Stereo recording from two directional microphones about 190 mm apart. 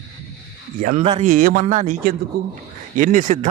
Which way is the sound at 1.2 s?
45° right (ahead or behind).